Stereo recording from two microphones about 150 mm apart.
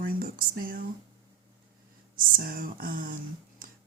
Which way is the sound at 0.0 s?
75° right (ahead or behind).